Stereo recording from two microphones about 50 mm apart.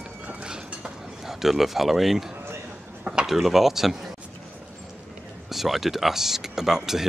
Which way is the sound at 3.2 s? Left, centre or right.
Centre.